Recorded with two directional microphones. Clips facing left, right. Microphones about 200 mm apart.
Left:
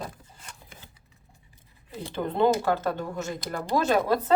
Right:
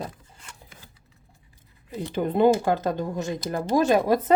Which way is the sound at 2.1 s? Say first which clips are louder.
Right 4 dB; 15° right (ahead or behind).